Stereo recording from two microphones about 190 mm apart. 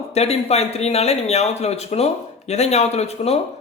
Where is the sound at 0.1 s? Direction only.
35° left (ahead or behind).